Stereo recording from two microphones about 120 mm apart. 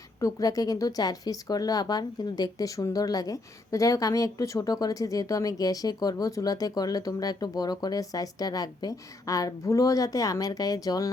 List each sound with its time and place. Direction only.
0.2 s speech: 30° left (ahead or behind)